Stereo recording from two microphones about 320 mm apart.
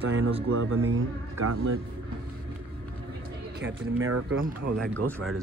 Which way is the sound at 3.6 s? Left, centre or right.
Right.